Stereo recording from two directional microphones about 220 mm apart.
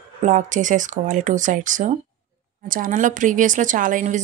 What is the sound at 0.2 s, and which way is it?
A woman's voice, 35° right (ahead or behind).